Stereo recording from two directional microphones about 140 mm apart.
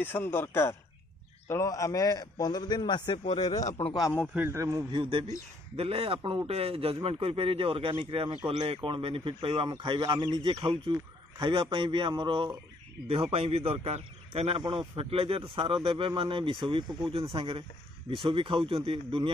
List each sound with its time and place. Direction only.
0.0 s a man's voice: 15° left (ahead or behind); by 3.2 s 35° left (ahead or behind)
3.3 s speech: 55° left (ahead or behind)
4.3 s a man's voice: 15° right (ahead or behind)
4.9 s a man's voice: 40° right (ahead or behind)
13.1 s a man's voice: 45° right (ahead or behind)